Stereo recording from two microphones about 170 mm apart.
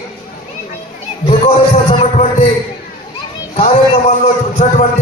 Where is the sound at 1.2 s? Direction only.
35° left (ahead or behind).